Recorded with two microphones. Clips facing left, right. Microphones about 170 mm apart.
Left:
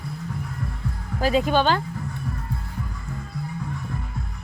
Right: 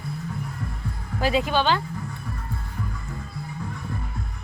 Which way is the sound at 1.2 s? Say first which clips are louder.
Left 2 dB; 45° left (ahead or behind).